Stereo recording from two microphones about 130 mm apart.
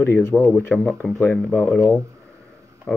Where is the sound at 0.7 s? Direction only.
5° left (ahead or behind).